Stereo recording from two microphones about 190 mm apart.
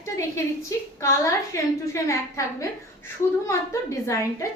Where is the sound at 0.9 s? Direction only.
15° left (ahead or behind).